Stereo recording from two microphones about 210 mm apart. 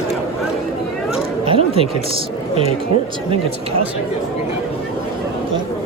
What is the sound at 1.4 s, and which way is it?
Music, 25° right (ahead or behind).